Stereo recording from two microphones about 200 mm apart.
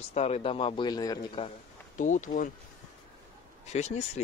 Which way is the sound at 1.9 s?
40° left (ahead or behind).